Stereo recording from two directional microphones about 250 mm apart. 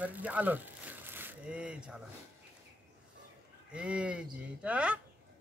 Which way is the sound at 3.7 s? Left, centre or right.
Centre.